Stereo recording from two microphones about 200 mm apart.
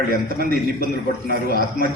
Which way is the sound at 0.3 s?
45° right (ahead or behind).